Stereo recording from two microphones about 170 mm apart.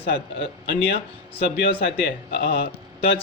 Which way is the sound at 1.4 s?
70° left (ahead or behind).